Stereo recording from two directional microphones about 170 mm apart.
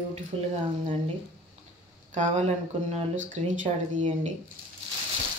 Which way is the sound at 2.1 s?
40° right (ahead or behind).